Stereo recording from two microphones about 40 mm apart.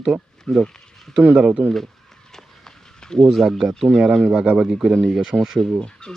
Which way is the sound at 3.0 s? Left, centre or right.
Centre.